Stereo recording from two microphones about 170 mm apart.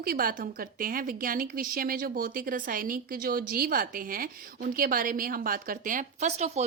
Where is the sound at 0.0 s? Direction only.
55° right (ahead or behind).